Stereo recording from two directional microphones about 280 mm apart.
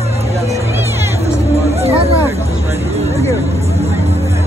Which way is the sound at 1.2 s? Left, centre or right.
Right.